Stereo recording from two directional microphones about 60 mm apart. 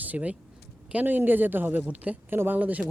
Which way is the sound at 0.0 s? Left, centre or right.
Right.